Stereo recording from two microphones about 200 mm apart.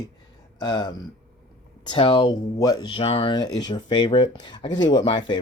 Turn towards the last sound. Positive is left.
turn(degrees=25)  # may be behind; listen again after turning